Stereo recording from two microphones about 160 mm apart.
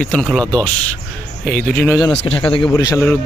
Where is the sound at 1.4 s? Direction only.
10° left (ahead or behind).